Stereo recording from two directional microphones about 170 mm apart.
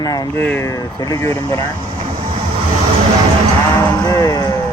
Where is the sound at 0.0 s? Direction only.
25° left (ahead or behind).